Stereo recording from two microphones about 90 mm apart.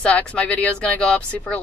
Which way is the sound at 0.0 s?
15° left (ahead or behind).